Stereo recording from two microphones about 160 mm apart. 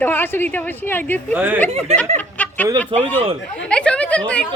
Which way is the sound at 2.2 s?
10° left (ahead or behind).